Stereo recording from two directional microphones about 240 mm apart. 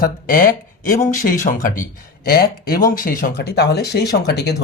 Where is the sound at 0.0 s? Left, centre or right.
Left.